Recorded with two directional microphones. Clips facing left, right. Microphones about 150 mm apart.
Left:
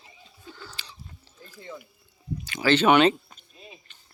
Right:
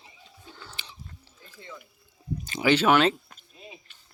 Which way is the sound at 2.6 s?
10° right (ahead or behind).